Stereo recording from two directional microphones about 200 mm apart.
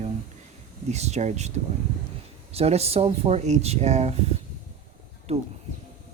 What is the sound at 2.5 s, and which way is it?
Speech, 30° right (ahead or behind).